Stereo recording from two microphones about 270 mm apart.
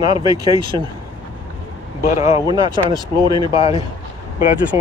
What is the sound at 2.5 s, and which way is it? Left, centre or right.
Speech, centre.